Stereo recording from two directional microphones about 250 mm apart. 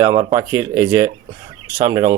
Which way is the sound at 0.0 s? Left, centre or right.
Centre.